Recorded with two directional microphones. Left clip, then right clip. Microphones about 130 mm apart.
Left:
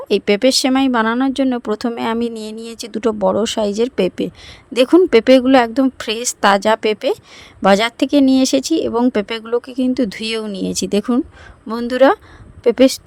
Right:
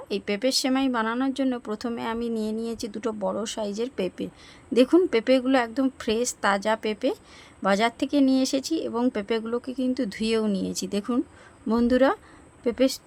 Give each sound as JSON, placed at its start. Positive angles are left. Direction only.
{"t": 0.1, "sound": "speech", "side_deg": 70}
{"t": 1.1, "sound": "speech", "side_deg": 60}